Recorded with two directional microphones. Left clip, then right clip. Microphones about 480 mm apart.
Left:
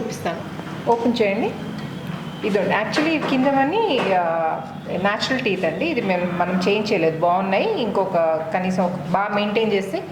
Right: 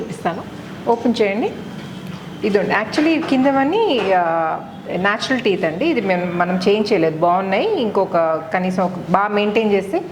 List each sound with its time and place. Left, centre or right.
0.9 s a woman's voice: right
2.4 s a woman's voice: right